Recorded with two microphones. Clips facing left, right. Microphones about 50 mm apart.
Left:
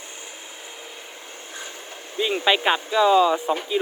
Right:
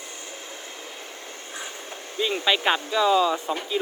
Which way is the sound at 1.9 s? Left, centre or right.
Centre.